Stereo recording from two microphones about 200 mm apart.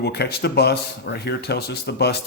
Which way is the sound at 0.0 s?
55° left (ahead or behind).